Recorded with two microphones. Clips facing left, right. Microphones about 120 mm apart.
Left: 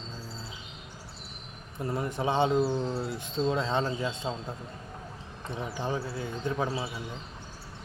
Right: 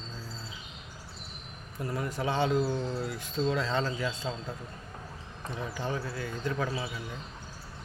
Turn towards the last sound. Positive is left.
turn(degrees=25)  # may be behind; listen again after turning